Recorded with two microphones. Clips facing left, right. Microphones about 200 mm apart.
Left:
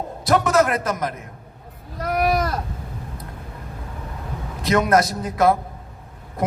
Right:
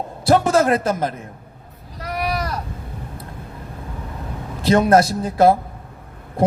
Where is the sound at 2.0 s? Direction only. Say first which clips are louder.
Left 4 dB; 50° left (ahead or behind).